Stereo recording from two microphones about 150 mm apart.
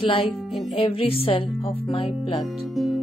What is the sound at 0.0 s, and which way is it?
Speech, 35° left (ahead or behind).